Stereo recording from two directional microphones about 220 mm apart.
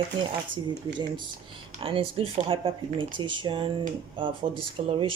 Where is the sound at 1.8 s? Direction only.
25° right (ahead or behind).